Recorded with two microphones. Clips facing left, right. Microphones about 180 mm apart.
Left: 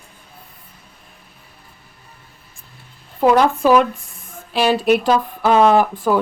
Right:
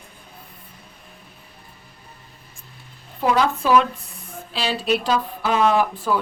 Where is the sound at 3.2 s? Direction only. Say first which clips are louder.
Left 6 dB; 45° left (ahead or behind).